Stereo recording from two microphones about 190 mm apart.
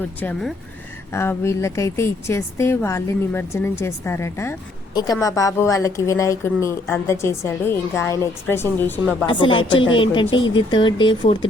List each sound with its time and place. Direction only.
0.2 s a woman's voice: 5° left (ahead or behind)
9.2 s speech: 25° left (ahead or behind)